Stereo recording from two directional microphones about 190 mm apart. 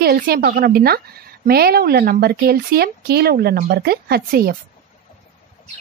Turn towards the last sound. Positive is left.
turn(degrees=-50)  # may be behind; listen again after turning